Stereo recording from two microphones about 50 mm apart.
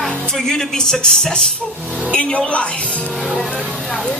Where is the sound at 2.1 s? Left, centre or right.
Left.